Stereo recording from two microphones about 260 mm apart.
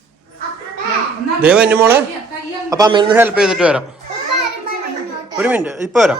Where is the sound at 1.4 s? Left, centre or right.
Centre.